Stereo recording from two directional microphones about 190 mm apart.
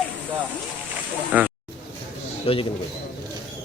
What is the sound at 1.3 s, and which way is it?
Speech, 10° right (ahead or behind).